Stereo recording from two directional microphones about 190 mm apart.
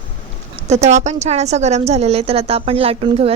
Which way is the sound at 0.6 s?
35° right (ahead or behind).